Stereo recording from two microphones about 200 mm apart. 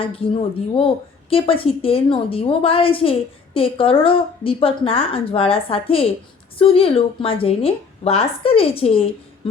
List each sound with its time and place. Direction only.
0.2 s a woman's voice: 25° left (ahead or behind)